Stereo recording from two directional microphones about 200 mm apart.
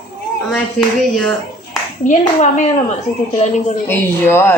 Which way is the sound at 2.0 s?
40° left (ahead or behind).